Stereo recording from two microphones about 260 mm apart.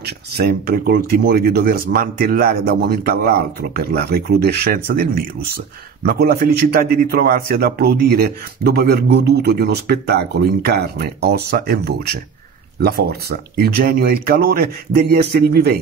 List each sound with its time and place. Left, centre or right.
0.0 s a man's voice: right